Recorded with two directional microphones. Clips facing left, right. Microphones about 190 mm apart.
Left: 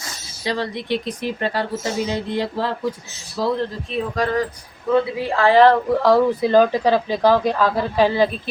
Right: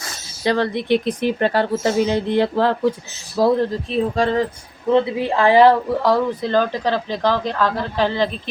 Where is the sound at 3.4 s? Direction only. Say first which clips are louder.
Right 5 dB; 45° right (ahead or behind).